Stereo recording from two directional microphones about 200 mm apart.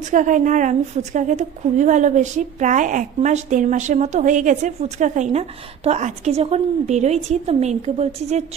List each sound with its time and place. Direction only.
0.1 s a woman's voice: 40° right (ahead or behind)